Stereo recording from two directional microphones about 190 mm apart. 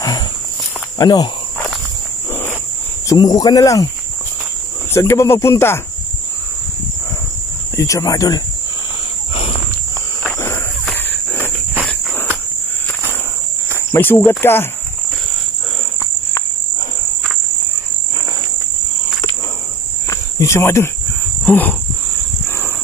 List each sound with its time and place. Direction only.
0.9 s cricket: 20° left (ahead or behind)
3.1 s speech: 20° left (ahead or behind)
4.9 s speech: 15° left (ahead or behind)
7.7 s speech: 15° left (ahead or behind)
10.3 s cricket: 15° left (ahead or behind)
13.9 s speech: 10° left (ahead or behind)
20.1 s cricket: 15° left (ahead or behind)
21.5 s speech: 10° left (ahead or behind)